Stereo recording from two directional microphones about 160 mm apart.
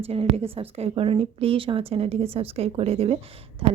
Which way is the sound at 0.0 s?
40° right (ahead or behind).